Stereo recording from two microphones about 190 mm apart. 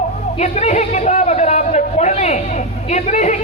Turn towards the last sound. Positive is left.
turn(degrees=35)  # may be behind; listen again after turning